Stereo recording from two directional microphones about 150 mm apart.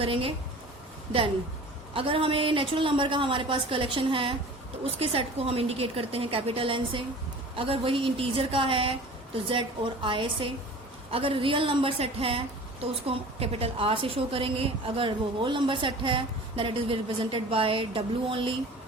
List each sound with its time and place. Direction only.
0.0 s a woman's voice: 35° right (ahead or behind)
1.9 s a woman's voice: 35° right (ahead or behind)